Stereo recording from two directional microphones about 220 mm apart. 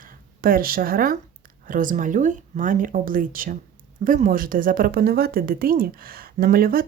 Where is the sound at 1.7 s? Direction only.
35° right (ahead or behind).